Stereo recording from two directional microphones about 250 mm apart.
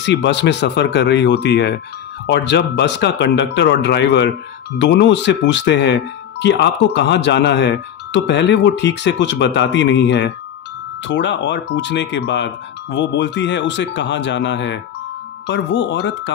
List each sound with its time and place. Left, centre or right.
0.0 s speech: left